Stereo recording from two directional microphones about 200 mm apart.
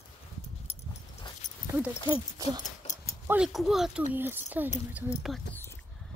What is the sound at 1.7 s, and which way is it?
Speech, 15° right (ahead or behind).